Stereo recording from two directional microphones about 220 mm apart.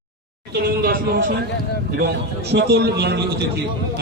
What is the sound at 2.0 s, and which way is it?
A man's voice, 50° right (ahead or behind).